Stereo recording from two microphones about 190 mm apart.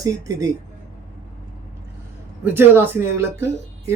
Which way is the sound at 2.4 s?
10° right (ahead or behind).